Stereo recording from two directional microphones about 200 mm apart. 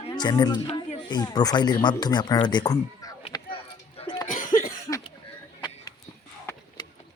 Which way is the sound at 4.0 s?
25° left (ahead or behind).